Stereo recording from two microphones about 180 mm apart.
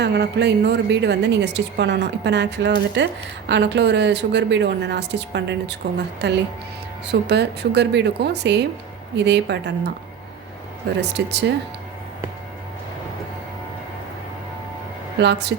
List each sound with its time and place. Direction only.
0.0 s a woman's voice: 70° right (ahead or behind)
11.1 s a woman's voice: 70° right (ahead or behind)
15.2 s a woman's voice: 70° right (ahead or behind)